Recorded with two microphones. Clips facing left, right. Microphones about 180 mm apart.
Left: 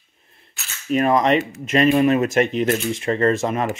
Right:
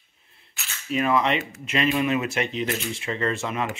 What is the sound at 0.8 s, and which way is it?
Speech, 45° left (ahead or behind).